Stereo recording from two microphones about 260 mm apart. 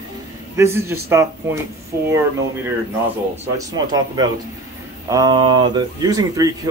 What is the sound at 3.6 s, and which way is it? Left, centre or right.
Speech, centre.